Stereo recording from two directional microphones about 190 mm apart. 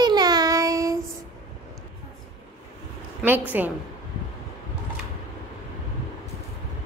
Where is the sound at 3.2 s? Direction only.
10° right (ahead or behind).